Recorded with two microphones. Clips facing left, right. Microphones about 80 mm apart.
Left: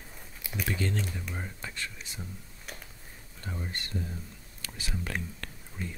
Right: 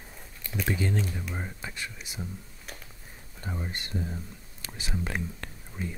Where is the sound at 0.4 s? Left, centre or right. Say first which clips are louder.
Right 2 dB; centre.